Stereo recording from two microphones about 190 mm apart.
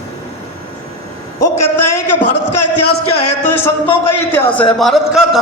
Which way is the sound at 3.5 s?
10° left (ahead or behind).